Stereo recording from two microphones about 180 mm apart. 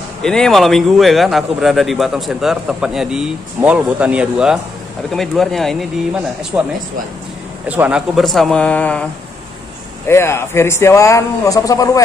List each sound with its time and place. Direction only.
0.2 s speech: 5° left (ahead or behind)
6.5 s speech: 15° right (ahead or behind); by 9.0 s 5° left (ahead or behind)
10.0 s speech: 15° left (ahead or behind)